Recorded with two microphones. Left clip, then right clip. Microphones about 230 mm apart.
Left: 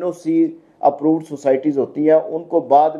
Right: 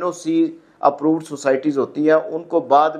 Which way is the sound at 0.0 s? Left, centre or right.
Right.